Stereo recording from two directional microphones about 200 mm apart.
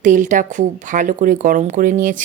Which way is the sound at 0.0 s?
40° right (ahead or behind).